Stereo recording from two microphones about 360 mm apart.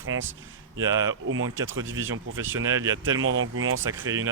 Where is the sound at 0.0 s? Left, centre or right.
Right.